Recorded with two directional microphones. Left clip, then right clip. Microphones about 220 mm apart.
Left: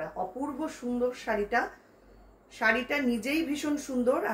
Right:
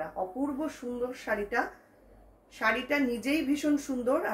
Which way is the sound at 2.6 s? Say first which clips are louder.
Left 1 dB; 15° left (ahead or behind).